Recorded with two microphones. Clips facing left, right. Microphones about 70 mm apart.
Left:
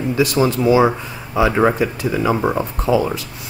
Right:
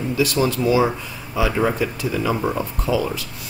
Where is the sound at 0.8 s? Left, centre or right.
Left.